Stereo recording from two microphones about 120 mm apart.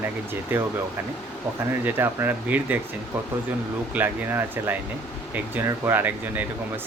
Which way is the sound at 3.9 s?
15° right (ahead or behind).